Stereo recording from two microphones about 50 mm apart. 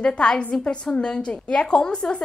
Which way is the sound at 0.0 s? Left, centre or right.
Centre.